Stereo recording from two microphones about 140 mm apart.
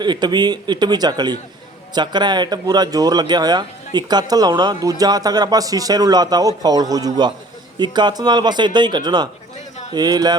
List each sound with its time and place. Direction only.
0.0 s a man's voice: 30° right (ahead or behind)